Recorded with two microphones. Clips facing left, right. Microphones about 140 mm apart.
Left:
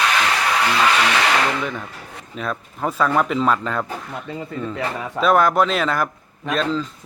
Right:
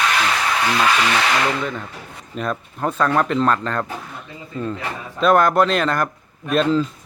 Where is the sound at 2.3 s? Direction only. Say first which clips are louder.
Right 2 dB; centre (ahead or behind).